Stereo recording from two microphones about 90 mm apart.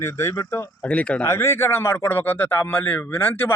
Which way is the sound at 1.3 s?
30° left (ahead or behind).